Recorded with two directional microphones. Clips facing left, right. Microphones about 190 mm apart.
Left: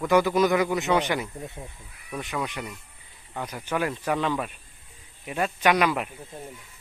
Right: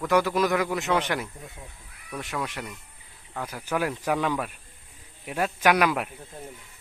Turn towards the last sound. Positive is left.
turn(degrees=-5)  # may be behind; listen again after turning